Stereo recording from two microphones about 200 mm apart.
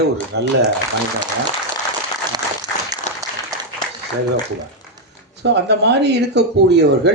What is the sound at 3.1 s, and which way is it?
Applause, 35° left (ahead or behind).